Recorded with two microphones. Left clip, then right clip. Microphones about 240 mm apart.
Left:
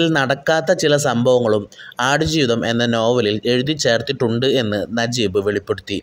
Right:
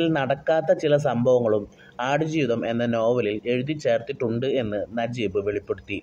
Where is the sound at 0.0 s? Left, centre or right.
Left.